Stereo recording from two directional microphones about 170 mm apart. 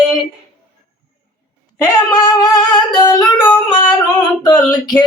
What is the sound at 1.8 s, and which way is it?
Singing, 20° left (ahead or behind).